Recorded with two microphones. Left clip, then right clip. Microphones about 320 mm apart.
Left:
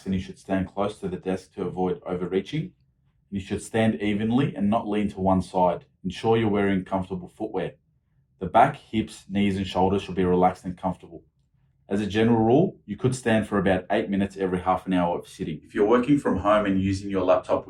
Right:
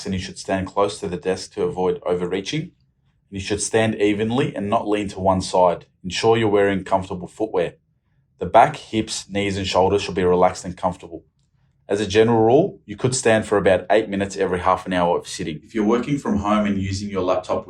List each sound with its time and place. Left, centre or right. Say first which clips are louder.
0.1 s speech: right 4 dB; right